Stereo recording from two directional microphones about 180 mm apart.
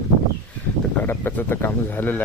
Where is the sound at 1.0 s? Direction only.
10° left (ahead or behind).